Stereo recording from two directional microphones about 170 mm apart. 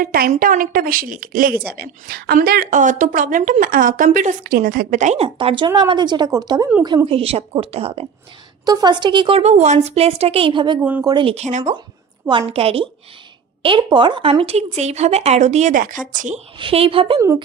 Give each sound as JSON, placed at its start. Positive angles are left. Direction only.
{"t": 0.0, "sound": "a woman's voice", "side_deg": -55}
{"t": 1.7, "sound": "speech", "side_deg": -65}
{"t": 8.6, "sound": "speech", "side_deg": -25}
{"t": 16.6, "sound": "speech", "side_deg": -35}